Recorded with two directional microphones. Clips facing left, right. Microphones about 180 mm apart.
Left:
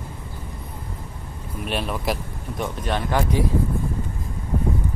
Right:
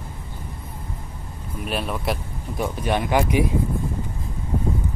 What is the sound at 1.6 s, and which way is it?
Speech, centre (ahead or behind).